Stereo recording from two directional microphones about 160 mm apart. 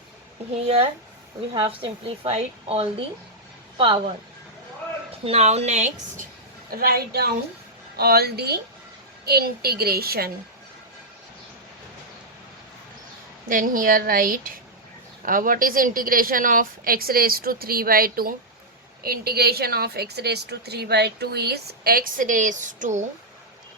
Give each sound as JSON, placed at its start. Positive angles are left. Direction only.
{"t": 1.5, "sound": "a woman's voice", "side_deg": -35}
{"t": 5.2, "sound": "a woman's voice", "side_deg": -40}
{"t": 6.7, "sound": "a woman's voice", "side_deg": -70}
{"t": 9.2, "sound": "a woman's voice", "side_deg": -75}
{"t": 13.5, "sound": "a woman's voice", "side_deg": -60}